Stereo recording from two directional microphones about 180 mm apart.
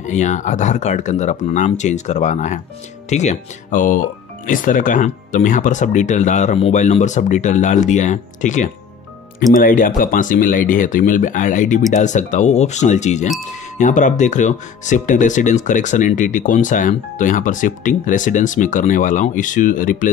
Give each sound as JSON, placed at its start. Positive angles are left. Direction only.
{"t": 0.0, "sound": "speech", "side_deg": 40}